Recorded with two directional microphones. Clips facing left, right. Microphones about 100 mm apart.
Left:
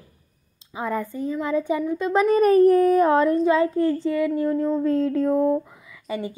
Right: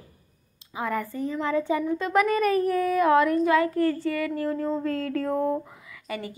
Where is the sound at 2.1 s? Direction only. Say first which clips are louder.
Left 6 dB; 30° left (ahead or behind).